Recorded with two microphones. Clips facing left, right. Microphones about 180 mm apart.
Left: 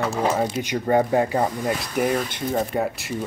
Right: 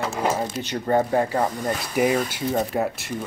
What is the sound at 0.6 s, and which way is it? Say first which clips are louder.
Speech: even; 15° left (ahead or behind).